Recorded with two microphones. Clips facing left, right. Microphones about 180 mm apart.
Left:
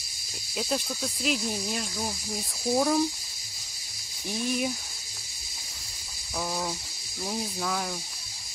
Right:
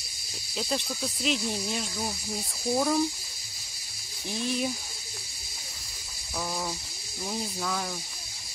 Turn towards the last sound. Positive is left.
turn(degrees=5)  # may be behind; listen again after turning